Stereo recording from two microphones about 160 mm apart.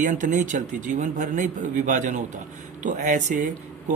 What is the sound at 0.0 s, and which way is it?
Speech, 50° right (ahead or behind).